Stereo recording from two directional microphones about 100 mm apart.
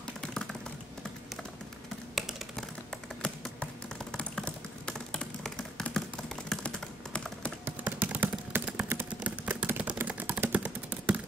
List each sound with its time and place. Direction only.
0.3 s typing: 5° left (ahead or behind)
2.1 s computer keyboard: 5° right (ahead or behind)
3.5 s typing: 10° left (ahead or behind)
7.6 s typing: 15° right (ahead or behind)
8.8 s a sound: 20° right (ahead or behind)